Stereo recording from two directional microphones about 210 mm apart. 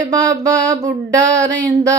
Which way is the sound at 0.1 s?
15° right (ahead or behind).